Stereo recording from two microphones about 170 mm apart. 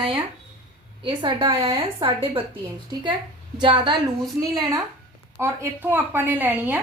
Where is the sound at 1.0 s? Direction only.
30° right (ahead or behind).